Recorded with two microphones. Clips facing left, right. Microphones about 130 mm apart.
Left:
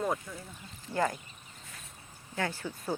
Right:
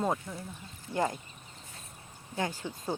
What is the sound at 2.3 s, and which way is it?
Speech, 15° right (ahead or behind).